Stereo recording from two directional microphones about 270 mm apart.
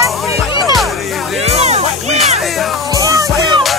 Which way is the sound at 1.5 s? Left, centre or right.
Right.